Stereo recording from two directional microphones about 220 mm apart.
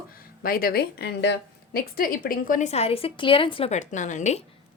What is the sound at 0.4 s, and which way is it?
A woman's voice, 40° left (ahead or behind).